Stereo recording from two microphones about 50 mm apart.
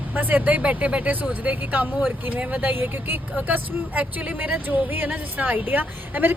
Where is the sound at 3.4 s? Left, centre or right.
Right.